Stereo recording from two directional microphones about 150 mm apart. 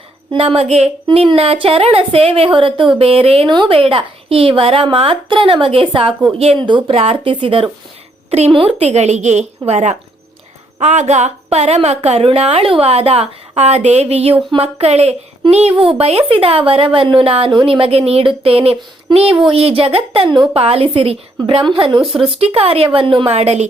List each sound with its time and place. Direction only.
0.3 s a woman's voice: 40° right (ahead or behind)
22.0 s speech: centre (ahead or behind)
22.4 s a woman's voice: 40° right (ahead or behind)